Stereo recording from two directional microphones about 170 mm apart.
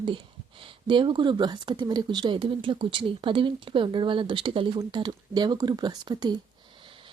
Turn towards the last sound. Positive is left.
turn(degrees=-25)  # may be behind; listen again after turning